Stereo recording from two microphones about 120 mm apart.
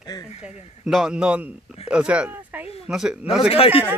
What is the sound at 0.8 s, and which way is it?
Speech, 5° right (ahead or behind).